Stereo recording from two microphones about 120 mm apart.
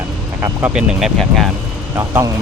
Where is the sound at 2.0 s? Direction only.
25° right (ahead or behind).